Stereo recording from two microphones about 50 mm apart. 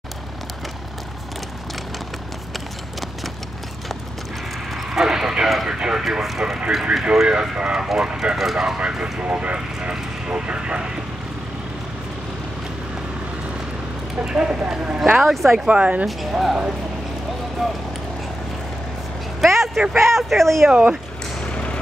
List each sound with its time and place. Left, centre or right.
4.9 s a sound: centre
5.7 s speech: centre
7.2 s speech: centre
14.2 s speech: centre
15.1 s speech: centre
15.6 s speech: right
16.1 s speech: centre
17.6 s speech: centre
19.4 s vehicle: centre
20.1 s speech: centre
21.4 s a sound: centre